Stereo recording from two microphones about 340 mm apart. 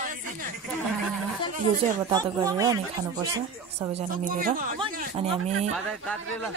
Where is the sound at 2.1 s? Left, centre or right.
Centre.